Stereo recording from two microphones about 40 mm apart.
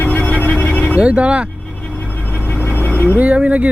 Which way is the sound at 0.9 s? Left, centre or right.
Right.